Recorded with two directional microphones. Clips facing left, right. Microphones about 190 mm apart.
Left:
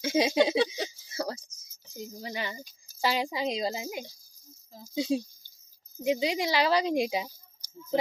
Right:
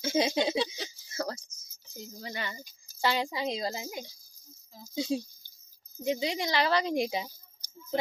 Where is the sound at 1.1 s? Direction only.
15° left (ahead or behind).